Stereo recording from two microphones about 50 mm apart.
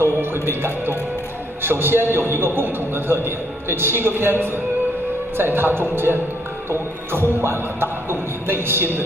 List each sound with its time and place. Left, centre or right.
0.0 s a man's voice: right